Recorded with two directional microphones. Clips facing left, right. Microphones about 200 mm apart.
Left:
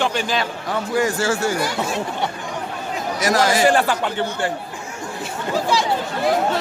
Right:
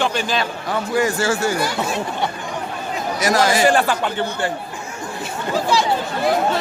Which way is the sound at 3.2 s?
15° right (ahead or behind).